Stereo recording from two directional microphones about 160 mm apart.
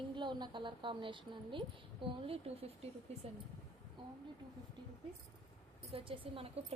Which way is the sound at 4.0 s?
30° right (ahead or behind).